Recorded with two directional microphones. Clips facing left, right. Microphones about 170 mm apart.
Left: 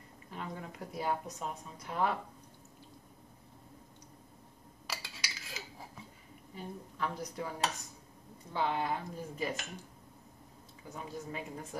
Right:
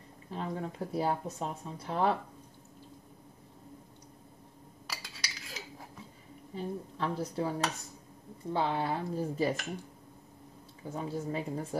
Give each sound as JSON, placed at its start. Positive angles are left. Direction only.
{"t": 0.3, "sound": "speech", "side_deg": -30}
{"t": 4.8, "sound": "cutlery", "side_deg": 0}
{"t": 6.5, "sound": "speech", "side_deg": -30}
{"t": 10.9, "sound": "speech", "side_deg": -30}